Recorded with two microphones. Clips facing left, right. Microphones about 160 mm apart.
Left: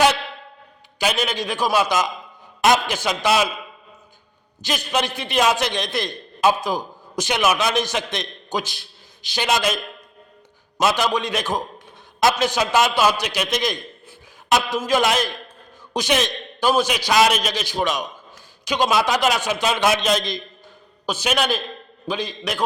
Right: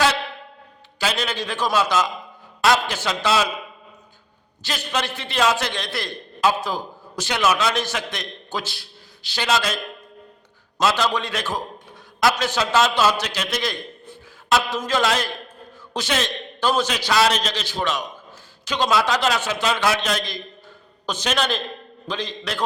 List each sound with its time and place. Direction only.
0.9 s a man's voice: 15° left (ahead or behind)
4.6 s a man's voice: 15° left (ahead or behind)
21.1 s a man's voice: 10° left (ahead or behind)